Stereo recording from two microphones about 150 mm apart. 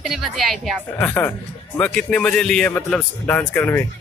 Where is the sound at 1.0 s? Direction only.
15° left (ahead or behind).